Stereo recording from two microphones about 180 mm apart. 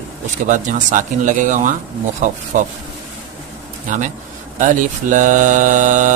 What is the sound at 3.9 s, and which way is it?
Mantra, 45° right (ahead or behind).